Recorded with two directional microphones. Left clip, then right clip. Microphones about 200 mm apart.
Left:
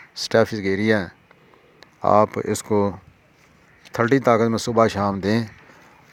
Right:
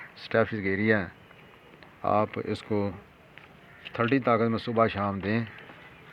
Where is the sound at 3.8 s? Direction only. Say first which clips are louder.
Left 7 dB; 50° left (ahead or behind).